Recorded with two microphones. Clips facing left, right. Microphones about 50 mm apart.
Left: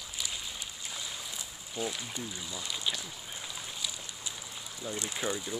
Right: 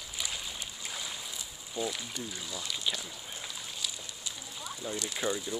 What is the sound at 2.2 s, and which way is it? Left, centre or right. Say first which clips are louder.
Speech: even; centre.